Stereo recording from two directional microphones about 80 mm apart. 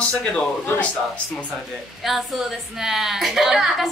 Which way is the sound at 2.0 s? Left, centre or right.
Centre.